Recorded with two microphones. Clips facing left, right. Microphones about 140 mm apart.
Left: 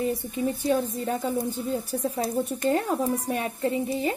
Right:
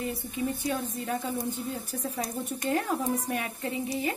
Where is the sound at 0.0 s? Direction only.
35° left (ahead or behind).